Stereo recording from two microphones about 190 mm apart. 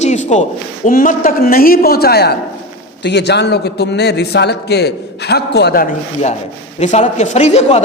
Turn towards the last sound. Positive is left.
turn(degrees=35)  # may be behind; listen again after turning